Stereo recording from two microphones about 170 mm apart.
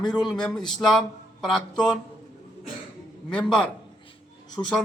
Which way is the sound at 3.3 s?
5° left (ahead or behind).